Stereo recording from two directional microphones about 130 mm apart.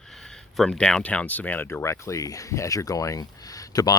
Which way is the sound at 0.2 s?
5° left (ahead or behind).